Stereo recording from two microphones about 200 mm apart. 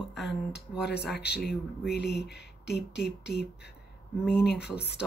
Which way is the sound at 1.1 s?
55° left (ahead or behind).